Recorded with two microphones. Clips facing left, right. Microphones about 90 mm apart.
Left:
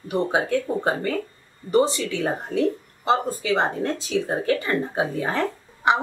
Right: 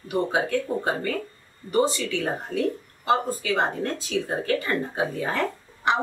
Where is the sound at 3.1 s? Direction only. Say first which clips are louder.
Left 2 dB; 25° left (ahead or behind).